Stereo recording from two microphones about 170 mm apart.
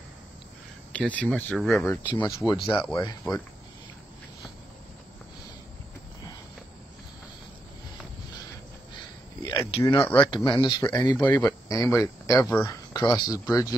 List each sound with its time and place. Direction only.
0.9 s speech: 5° left (ahead or behind)
2.1 s speech: 20° left (ahead or behind)
9.4 s cricket: 20° left (ahead or behind)
9.7 s a sound: 35° left (ahead or behind)
9.9 s speech: 10° left (ahead or behind)
10.2 s speech: 30° left (ahead or behind); by 13.0 s 15° left (ahead or behind)
13.0 s speech: 25° left (ahead or behind)